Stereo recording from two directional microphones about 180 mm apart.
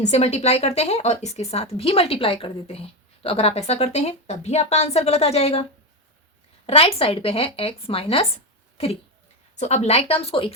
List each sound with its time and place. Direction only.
0.0 s a woman's voice: 35° left (ahead or behind)
6.7 s a woman's voice: 30° left (ahead or behind)